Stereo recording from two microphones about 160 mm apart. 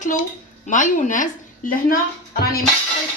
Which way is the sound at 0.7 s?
55° left (ahead or behind).